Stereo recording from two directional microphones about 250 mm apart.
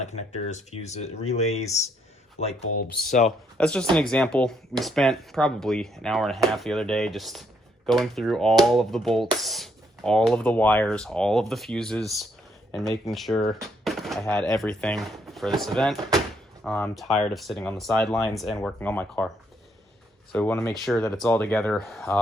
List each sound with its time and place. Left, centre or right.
0.0 s speech: left
3.2 s speech: centre
20.3 s speech: centre